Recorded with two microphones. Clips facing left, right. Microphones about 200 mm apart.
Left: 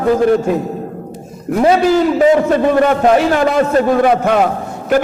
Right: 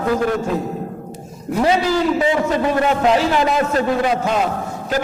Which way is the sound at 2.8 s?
50° left (ahead or behind).